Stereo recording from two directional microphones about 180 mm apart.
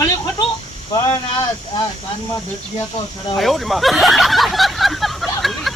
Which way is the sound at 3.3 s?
Centre (ahead or behind).